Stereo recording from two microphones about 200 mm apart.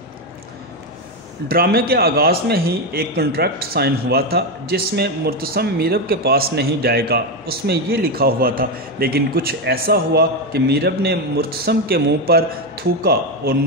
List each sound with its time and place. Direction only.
1.5 s a man's voice: 50° right (ahead or behind)